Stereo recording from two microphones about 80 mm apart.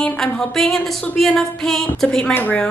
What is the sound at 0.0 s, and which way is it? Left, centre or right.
A woman's voice, centre.